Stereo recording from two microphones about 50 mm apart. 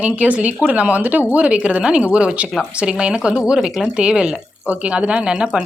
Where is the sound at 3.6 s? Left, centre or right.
Centre.